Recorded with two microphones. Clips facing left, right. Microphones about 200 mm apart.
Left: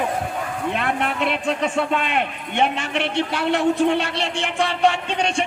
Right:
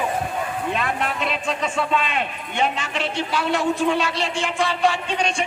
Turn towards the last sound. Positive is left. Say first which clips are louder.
# left 1 dB
turn(degrees=60)  # may be behind; listen again after turning